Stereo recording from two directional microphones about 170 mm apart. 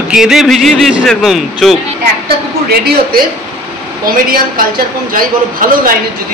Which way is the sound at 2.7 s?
65° right (ahead or behind).